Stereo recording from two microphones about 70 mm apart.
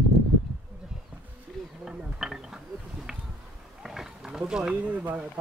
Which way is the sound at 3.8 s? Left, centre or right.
Centre.